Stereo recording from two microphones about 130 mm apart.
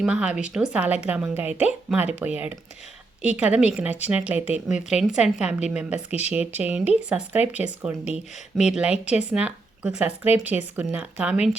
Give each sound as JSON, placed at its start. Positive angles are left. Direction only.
{"t": 0.0, "sound": "speech", "side_deg": -10}